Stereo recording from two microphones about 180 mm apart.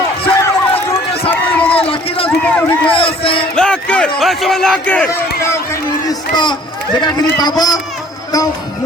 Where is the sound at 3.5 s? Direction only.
5° left (ahead or behind).